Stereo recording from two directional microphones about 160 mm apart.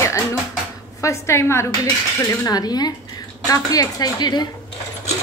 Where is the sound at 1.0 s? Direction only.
15° left (ahead or behind).